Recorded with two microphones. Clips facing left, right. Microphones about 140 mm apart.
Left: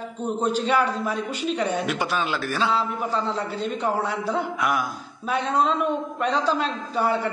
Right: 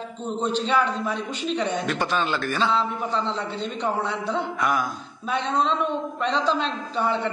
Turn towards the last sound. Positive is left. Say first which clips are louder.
# left 1 dB
turn(degrees=10)  # may be behind; listen again after turning